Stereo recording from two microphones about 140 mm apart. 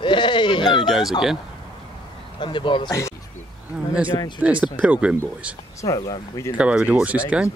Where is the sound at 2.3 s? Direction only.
35° left (ahead or behind).